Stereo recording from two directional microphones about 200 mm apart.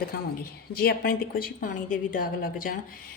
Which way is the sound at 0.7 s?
50° left (ahead or behind).